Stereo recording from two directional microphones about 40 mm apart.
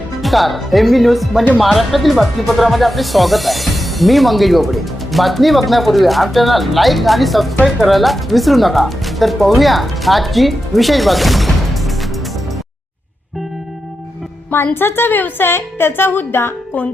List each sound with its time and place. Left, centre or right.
0.2 s speech: centre
14.5 s a woman's voice: left